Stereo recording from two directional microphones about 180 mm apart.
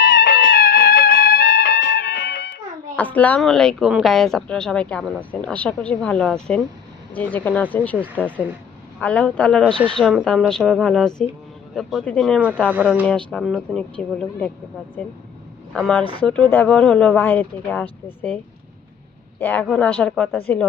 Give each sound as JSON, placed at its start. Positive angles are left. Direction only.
{"t": 0.3, "sound": "music", "side_deg": 55}
{"t": 2.9, "sound": "a woman's voice", "side_deg": 10}
{"t": 12.6, "sound": "speech", "side_deg": -5}
{"t": 13.1, "sound": "a woman's voice", "side_deg": 5}
{"t": 15.7, "sound": "a woman's voice", "side_deg": 5}
{"t": 19.4, "sound": "speech", "side_deg": 10}